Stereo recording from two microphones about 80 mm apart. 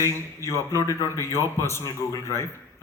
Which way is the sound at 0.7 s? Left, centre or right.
Left.